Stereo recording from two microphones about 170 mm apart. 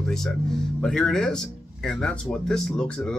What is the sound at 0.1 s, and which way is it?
Speech, 5° left (ahead or behind).